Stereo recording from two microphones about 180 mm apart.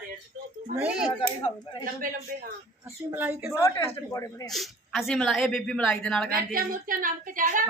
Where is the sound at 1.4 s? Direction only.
25° left (ahead or behind).